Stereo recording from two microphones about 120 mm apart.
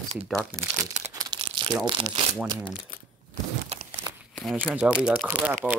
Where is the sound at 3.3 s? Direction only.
70° right (ahead or behind).